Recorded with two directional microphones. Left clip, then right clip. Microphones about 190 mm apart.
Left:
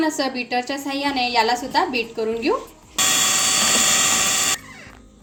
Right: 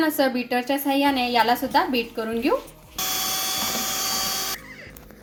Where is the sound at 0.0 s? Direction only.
25° right (ahead or behind).